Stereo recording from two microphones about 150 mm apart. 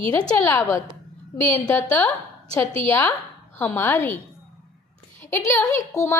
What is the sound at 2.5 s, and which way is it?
A woman's voice, 25° left (ahead or behind).